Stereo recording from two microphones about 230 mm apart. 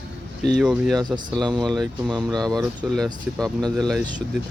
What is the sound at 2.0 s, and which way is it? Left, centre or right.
Speech, centre.